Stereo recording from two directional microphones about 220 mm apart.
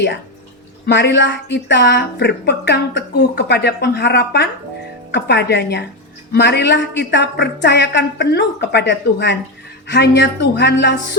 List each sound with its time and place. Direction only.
0.9 s a woman's voice: 50° left (ahead or behind)